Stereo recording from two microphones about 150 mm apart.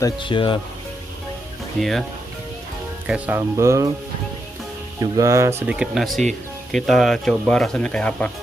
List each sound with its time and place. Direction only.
0.0 s speech: 35° left (ahead or behind)
1.8 s speech: centre (ahead or behind)
3.1 s speech: 15° right (ahead or behind)
5.1 s speech: 20° right (ahead or behind); by 8.3 s 5° left (ahead or behind)